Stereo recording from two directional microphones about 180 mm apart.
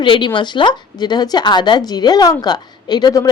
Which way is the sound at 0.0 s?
25° left (ahead or behind).